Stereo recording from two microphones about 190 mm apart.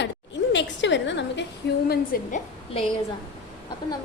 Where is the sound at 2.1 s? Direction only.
50° left (ahead or behind).